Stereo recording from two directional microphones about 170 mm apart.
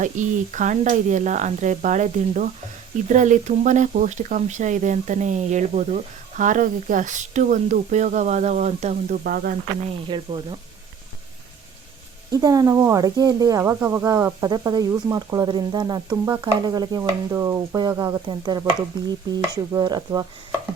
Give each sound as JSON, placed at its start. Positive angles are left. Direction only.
{"t": 0.0, "sound": "speech", "side_deg": -45}
{"t": 10.1, "sound": "speech", "side_deg": -30}
{"t": 12.3, "sound": "speech", "side_deg": -20}